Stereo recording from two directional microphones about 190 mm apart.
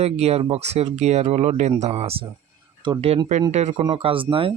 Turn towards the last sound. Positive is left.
turn(degrees=-25)  # may be behind; listen again after turning